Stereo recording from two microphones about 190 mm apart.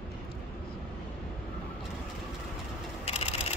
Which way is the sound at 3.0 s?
30° left (ahead or behind).